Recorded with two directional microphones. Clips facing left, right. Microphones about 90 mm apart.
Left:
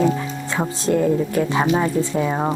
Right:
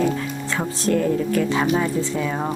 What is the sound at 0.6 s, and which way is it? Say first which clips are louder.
Speech: left 2 dB; 20° left (ahead or behind).